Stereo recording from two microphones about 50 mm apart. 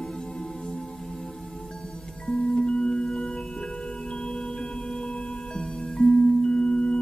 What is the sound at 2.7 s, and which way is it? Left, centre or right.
Singing bowl, centre.